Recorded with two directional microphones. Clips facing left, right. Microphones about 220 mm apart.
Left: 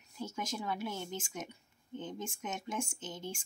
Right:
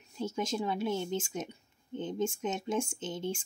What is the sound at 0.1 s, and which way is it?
A woman's voice, 25° right (ahead or behind).